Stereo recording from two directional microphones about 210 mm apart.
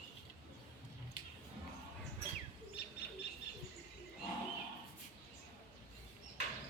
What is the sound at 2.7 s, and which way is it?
Bird, 55° left (ahead or behind).